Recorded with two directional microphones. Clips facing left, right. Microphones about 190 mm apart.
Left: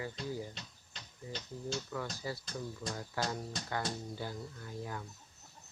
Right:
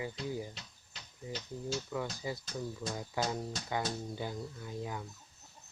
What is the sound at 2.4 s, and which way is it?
Speech, 5° right (ahead or behind).